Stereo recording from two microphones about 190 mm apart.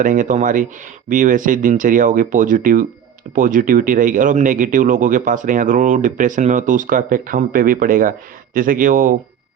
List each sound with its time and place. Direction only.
0.0 s speech: 45° right (ahead or behind)